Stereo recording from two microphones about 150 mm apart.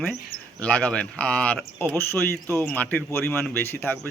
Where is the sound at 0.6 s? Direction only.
10° left (ahead or behind).